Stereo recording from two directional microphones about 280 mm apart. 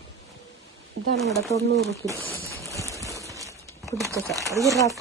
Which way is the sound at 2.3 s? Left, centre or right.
Left.